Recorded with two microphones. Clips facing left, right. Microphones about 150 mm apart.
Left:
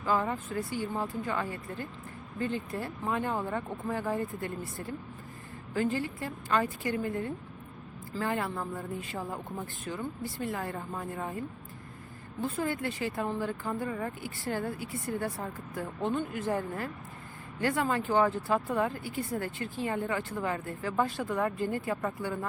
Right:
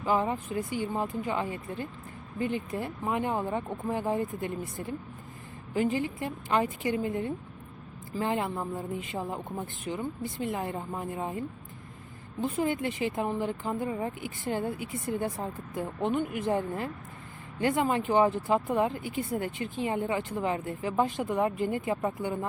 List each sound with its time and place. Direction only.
0.0 s speech: 20° right (ahead or behind)